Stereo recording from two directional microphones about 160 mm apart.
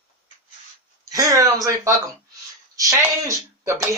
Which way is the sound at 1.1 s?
20° right (ahead or behind).